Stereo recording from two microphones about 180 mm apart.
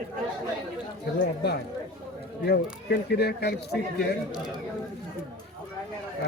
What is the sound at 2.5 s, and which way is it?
Speech, 65° left (ahead or behind).